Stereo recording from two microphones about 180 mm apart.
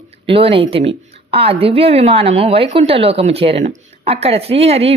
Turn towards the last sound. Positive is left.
turn(degrees=-35)  # may be behind; listen again after turning